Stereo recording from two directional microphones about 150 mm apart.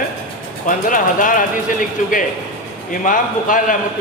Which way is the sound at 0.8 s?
65° left (ahead or behind).